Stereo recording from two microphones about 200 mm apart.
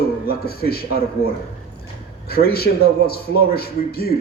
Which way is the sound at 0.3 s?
50° left (ahead or behind).